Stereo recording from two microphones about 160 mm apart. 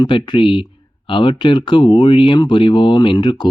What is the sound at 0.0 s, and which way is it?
Speech, 30° left (ahead or behind).